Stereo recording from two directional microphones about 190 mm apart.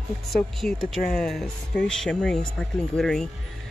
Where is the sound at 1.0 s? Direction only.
50° left (ahead or behind).